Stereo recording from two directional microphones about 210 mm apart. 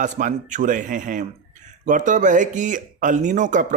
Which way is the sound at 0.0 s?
35° right (ahead or behind).